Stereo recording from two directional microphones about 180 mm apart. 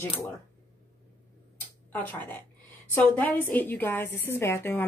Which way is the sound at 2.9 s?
10° left (ahead or behind).